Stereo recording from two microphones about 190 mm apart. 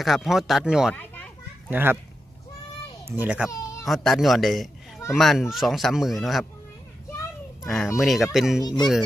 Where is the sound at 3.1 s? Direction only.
5° right (ahead or behind).